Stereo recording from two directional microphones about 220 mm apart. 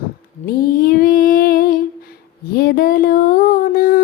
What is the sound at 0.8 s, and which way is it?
Female singing, 40° left (ahead or behind).